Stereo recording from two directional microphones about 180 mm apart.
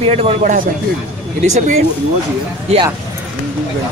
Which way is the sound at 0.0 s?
35° right (ahead or behind).